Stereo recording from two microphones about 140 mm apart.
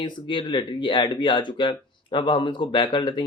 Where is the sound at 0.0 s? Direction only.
35° left (ahead or behind).